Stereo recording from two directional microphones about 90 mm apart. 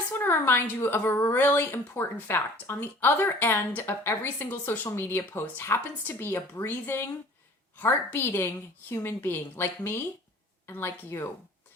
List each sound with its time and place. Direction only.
0.1 s a woman's voice: 25° left (ahead or behind)